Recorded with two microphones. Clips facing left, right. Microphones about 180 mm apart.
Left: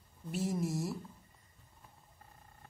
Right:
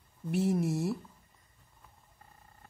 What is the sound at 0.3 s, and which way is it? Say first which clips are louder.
Speech: right 6 dB; 60° right (ahead or behind).